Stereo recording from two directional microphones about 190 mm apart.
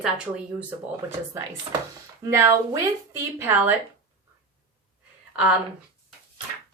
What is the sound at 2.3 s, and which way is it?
A woman's voice, 15° right (ahead or behind).